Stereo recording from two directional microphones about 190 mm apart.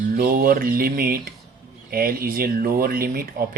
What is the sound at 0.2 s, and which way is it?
Speech, 50° right (ahead or behind).